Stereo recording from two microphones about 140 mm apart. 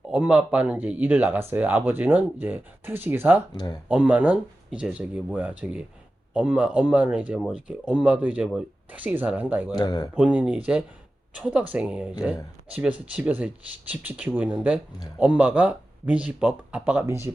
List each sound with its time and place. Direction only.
0.1 s speech: 10° right (ahead or behind)
3.5 s speech: 30° left (ahead or behind)
3.8 s speech: 10° right (ahead or behind)
9.7 s speech: 30° left (ahead or behind)
10.2 s speech: 10° right (ahead or behind)